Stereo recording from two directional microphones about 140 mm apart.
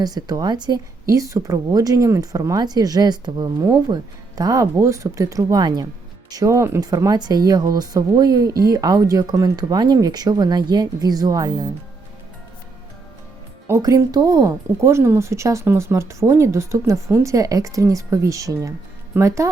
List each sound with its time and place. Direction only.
0.0 s speech: 25° right (ahead or behind)
13.7 s speech: 20° right (ahead or behind)